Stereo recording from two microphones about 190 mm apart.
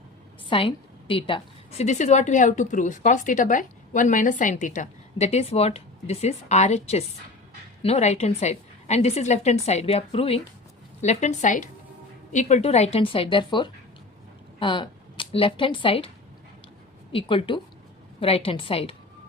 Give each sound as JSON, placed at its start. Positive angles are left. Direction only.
{"t": 0.5, "sound": "a woman's voice", "side_deg": 30}
{"t": 17.1, "sound": "speech", "side_deg": 30}